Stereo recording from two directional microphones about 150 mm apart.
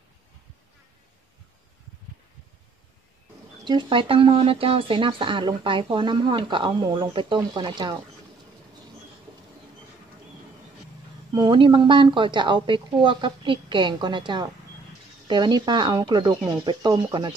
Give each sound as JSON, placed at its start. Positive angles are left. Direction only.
{"t": 3.6, "sound": "speech", "side_deg": -35}
{"t": 11.3, "sound": "speech", "side_deg": -30}